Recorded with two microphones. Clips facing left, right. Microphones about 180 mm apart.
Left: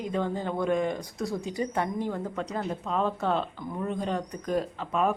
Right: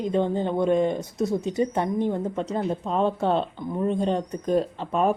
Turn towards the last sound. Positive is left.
turn(degrees=-30)  # may be behind; listen again after turning